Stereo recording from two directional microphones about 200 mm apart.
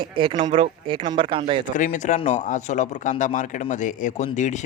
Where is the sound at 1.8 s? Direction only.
40° left (ahead or behind).